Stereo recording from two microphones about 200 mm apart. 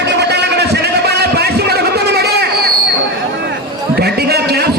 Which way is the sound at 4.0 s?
50° right (ahead or behind).